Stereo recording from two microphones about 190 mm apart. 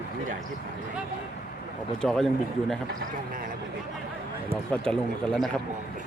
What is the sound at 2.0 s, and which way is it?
Speech, 5° left (ahead or behind).